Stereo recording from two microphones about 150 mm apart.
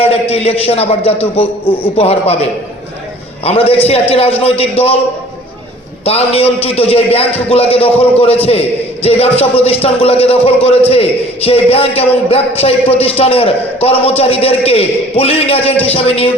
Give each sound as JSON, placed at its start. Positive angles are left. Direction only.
{"t": 0.0, "sound": "a man's voice", "side_deg": 40}
{"t": 6.1, "sound": "a man's voice", "side_deg": 40}